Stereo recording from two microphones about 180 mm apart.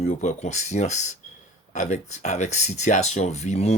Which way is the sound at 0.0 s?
40° left (ahead or behind).